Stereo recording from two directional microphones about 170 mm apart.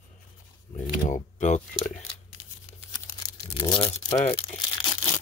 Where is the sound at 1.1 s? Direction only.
45° left (ahead or behind).